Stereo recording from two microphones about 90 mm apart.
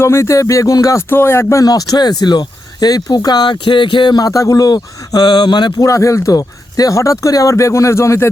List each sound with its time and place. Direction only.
0.0 s speech: 30° left (ahead or behind)
1.1 s speech: 25° left (ahead or behind)
1.6 s speech: 45° left (ahead or behind)
5.8 s speech: 35° left (ahead or behind)